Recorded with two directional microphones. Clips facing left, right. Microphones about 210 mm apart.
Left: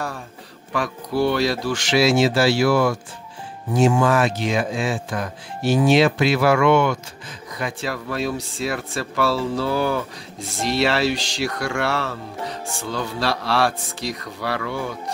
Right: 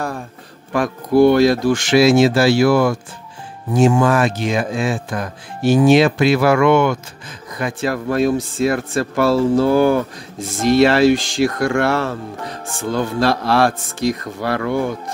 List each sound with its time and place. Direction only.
0.7 s speech: 50° right (ahead or behind)